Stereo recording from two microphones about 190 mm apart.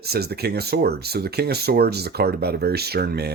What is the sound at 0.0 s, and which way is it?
Speech, 55° right (ahead or behind).